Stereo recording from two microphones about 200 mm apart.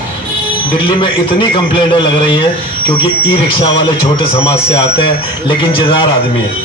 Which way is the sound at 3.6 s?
25° left (ahead or behind).